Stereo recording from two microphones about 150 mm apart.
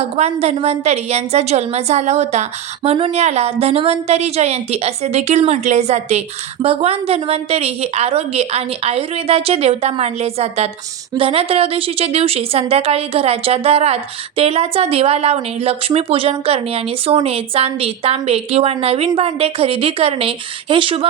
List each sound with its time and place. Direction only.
0.0 s a woman's voice: 45° right (ahead or behind)